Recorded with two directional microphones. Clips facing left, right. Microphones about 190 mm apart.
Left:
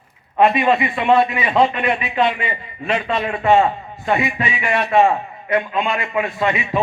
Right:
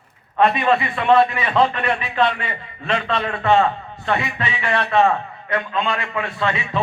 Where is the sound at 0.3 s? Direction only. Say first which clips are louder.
Left 2 dB; 15° left (ahead or behind).